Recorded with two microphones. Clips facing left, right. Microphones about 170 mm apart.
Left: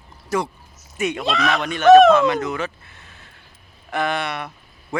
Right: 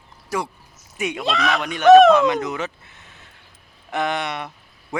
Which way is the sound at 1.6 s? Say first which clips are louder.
Left 1 dB; 15° right (ahead or behind).